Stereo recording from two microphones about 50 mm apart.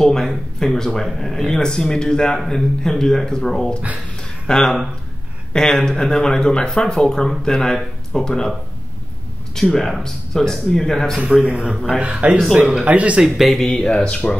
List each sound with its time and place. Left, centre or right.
0.0 s speech: centre
9.6 s speech: centre
11.4 s speech: right
13.2 s speech: centre
13.7 s speech: centre